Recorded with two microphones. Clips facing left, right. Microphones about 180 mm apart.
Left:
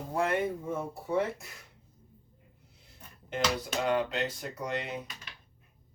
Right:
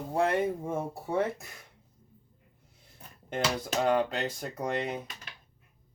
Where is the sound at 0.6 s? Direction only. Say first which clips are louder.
Right 2 dB; 50° right (ahead or behind).